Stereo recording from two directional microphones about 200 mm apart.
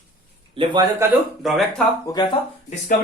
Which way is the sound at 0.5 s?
20° right (ahead or behind).